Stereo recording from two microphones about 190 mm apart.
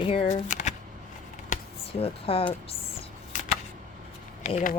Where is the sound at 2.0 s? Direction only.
30° left (ahead or behind).